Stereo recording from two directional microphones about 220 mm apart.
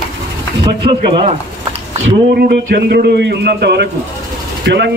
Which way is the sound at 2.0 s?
45° right (ahead or behind).